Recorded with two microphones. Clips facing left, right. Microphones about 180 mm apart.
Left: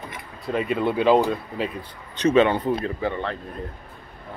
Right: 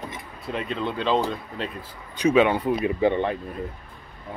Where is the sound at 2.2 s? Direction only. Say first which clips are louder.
Left 1 dB; 10° right (ahead or behind).